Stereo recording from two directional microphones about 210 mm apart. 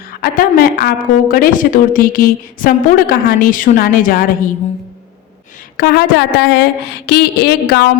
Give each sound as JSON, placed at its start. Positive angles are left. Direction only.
{"t": 0.2, "sound": "a woman's voice", "side_deg": 45}
{"t": 5.7, "sound": "a woman's voice", "side_deg": 50}